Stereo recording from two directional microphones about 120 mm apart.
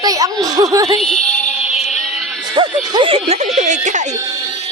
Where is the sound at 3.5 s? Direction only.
90° right.